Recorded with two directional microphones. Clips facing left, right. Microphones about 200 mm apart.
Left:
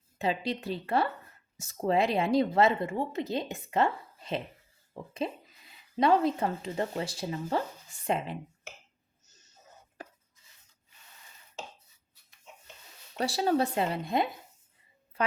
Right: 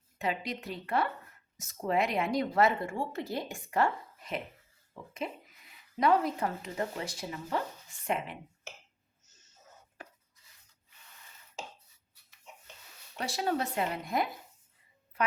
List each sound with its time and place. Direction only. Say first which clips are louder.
0.2 s speech: left 4 dB; 30° left (ahead or behind)
9.2 s a sound: left 3 dB; 35° left (ahead or behind)
10.0 s chopping: left 4 dB; 35° left (ahead or behind)
13.1 s speech: left 5 dB; 35° left (ahead or behind)